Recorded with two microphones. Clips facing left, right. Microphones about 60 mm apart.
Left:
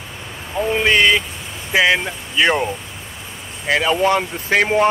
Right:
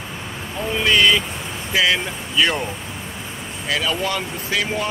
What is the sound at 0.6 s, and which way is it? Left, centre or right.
Speech, centre.